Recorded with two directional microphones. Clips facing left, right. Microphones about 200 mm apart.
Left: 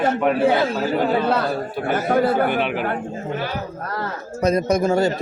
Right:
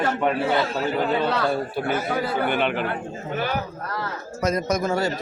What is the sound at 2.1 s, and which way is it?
Speech, 55° left (ahead or behind).